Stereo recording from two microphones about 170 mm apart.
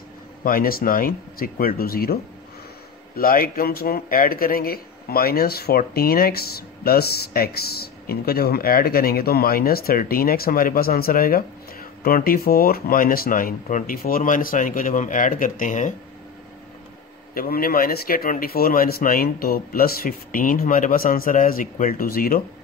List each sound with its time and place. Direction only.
0.4 s a man's voice: 55° left (ahead or behind)
3.2 s a man's voice: 60° left (ahead or behind)
17.3 s a man's voice: 60° left (ahead or behind)